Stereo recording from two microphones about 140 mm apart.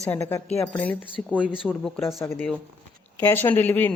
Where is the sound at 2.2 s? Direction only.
15° left (ahead or behind).